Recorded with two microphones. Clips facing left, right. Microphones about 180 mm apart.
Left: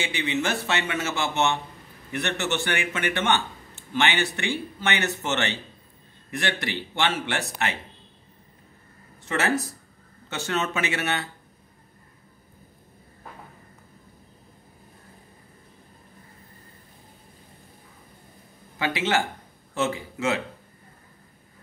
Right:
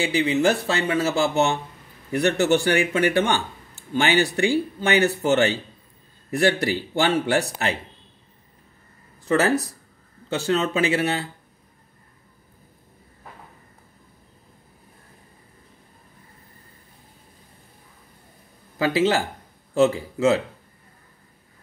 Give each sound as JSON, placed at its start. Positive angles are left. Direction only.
{"t": 0.0, "sound": "speech", "side_deg": -35}
{"t": 9.2, "sound": "speech", "side_deg": -35}
{"t": 18.8, "sound": "speech", "side_deg": -35}